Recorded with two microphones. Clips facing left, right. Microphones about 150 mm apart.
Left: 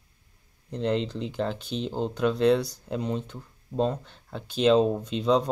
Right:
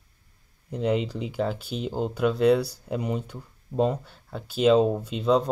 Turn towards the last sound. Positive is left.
turn(degrees=-5)  # may be behind; listen again after turning